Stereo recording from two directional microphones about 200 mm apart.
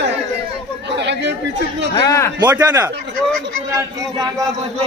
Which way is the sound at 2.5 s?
10° right (ahead or behind).